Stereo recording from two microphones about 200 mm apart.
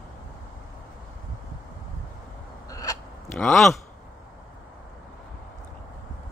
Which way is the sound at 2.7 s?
15° left (ahead or behind).